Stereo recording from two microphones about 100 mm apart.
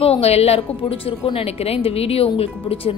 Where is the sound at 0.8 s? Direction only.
65° left (ahead or behind).